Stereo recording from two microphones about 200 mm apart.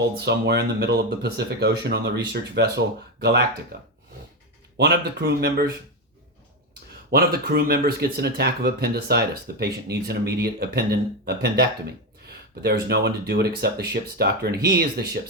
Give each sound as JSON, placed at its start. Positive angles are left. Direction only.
{"t": 0.2, "sound": "speech", "side_deg": -55}
{"t": 7.1, "sound": "speech", "side_deg": -50}